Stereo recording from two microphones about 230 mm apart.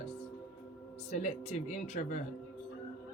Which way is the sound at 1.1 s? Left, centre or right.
Left.